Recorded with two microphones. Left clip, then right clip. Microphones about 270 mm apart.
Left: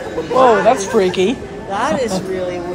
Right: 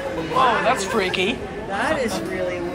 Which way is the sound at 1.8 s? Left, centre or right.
Left.